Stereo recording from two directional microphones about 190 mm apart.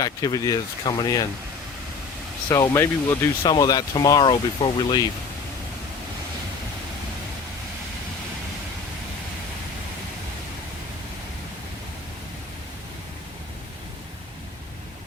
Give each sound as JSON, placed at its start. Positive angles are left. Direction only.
{"t": 0.0, "sound": "speech", "side_deg": 20}
{"t": 2.5, "sound": "speech", "side_deg": 15}